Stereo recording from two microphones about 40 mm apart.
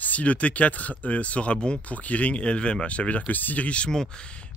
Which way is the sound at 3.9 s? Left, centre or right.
Centre.